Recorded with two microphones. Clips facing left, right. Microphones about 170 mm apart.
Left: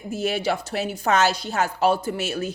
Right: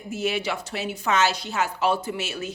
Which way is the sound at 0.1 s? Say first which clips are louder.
Left 3 dB; 40° left (ahead or behind).